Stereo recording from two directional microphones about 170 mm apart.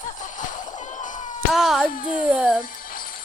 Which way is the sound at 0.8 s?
45° left (ahead or behind).